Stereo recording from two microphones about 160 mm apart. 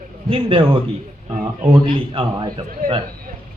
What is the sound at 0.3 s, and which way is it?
Speech, 35° right (ahead or behind).